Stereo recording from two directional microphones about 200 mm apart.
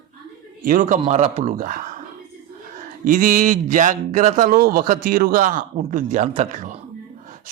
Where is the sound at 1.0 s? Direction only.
30° right (ahead or behind).